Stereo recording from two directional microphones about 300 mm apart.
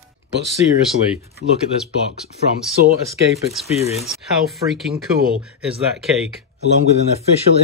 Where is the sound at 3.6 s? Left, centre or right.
Left.